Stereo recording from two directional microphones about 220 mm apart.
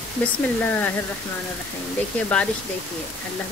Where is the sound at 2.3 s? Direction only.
5° left (ahead or behind).